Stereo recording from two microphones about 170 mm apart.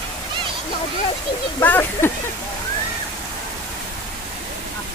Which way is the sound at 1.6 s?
10° left (ahead or behind).